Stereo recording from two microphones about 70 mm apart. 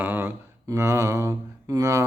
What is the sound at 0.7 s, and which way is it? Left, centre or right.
Mantra, right.